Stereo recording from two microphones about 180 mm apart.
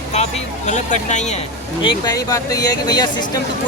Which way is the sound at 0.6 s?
40° left (ahead or behind).